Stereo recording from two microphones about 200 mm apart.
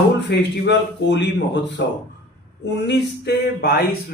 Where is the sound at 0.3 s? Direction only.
60° left (ahead or behind).